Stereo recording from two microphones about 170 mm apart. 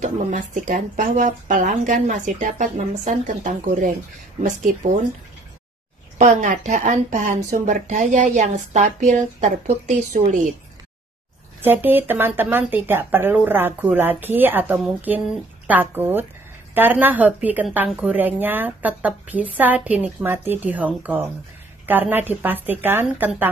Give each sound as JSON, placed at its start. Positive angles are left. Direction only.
{"t": 0.0, "sound": "speech", "side_deg": -50}
{"t": 6.1, "sound": "speech", "side_deg": -45}
{"t": 11.6, "sound": "speech", "side_deg": -10}